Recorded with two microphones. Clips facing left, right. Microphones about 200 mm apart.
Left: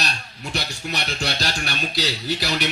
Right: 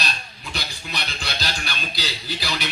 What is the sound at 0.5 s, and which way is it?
Speech, 65° left (ahead or behind).